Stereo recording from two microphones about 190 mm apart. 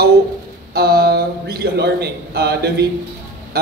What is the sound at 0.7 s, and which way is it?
A man's voice, 55° right (ahead or behind).